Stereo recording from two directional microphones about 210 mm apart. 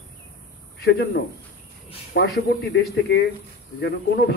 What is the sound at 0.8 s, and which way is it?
Speech, 50° left (ahead or behind).